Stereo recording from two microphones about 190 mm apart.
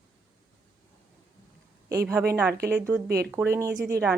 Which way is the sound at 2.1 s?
5° right (ahead or behind).